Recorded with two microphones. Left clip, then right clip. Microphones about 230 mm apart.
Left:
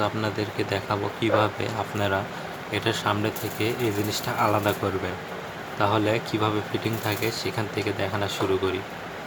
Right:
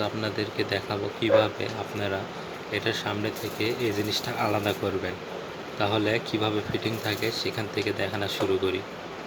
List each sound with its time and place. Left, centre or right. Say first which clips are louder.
0.0 s speech: left 3 dB; centre
5.8 s speech: left 2 dB; centre